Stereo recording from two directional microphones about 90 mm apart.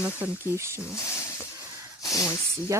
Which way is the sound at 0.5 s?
30° right (ahead or behind).